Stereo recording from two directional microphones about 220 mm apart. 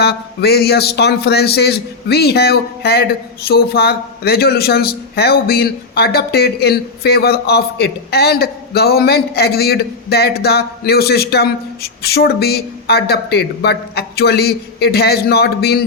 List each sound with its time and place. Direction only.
0.0 s a man's voice: 45° left (ahead or behind)